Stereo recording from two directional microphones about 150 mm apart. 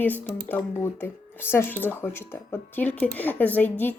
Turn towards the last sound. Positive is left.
turn(degrees=10)  # may be behind; listen again after turning